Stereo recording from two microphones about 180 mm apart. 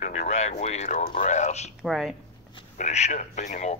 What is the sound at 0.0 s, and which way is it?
Speech, 40° left (ahead or behind).